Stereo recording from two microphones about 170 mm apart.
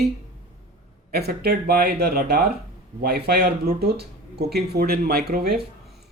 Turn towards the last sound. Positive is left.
turn(degrees=-65)  # may be behind; listen again after turning